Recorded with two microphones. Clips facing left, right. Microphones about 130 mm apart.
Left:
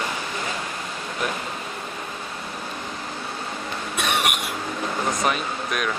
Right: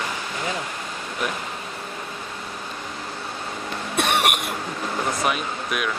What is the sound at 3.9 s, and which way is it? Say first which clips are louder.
Cough: right 3 dB; 55° right (ahead or behind).